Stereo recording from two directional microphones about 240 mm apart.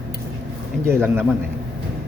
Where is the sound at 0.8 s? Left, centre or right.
Centre.